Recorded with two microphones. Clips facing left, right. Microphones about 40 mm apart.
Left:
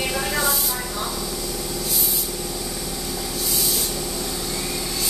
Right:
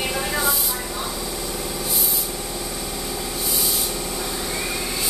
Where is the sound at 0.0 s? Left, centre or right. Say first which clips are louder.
Even; centre.